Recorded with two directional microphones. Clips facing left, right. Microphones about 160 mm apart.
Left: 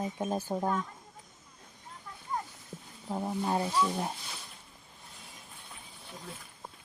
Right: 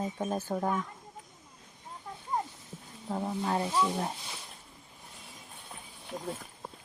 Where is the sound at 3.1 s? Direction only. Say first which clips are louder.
Even; 10° left (ahead or behind).